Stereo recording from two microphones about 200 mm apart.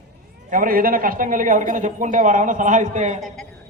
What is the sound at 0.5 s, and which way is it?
Speech, 45° right (ahead or behind).